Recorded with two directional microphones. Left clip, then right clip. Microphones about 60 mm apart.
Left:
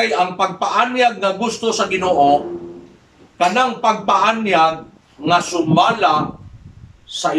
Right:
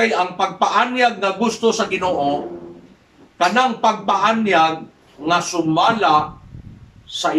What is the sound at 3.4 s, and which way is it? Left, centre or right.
A man's voice, centre.